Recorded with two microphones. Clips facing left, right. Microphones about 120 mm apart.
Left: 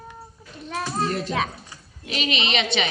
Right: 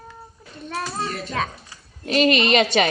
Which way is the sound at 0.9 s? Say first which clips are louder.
Left 3 dB; 10° left (ahead or behind).